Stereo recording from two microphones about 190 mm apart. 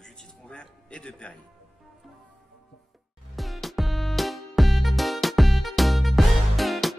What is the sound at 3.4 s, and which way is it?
Music, centre (ahead or behind).